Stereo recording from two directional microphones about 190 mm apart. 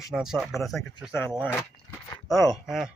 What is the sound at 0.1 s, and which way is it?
Speech, centre (ahead or behind).